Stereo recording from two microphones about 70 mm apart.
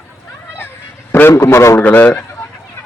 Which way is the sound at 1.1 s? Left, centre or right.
Left.